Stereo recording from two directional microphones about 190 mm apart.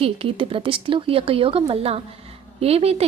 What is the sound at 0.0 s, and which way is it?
A woman's voice, 30° right (ahead or behind).